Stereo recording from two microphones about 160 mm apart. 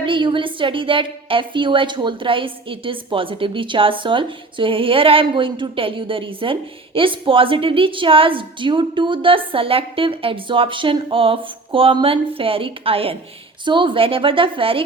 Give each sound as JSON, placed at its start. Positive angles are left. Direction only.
{"t": 0.0, "sound": "a woman's voice", "side_deg": -30}